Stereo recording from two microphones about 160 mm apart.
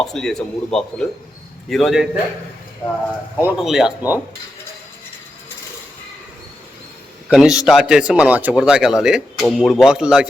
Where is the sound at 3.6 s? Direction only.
Centre (ahead or behind).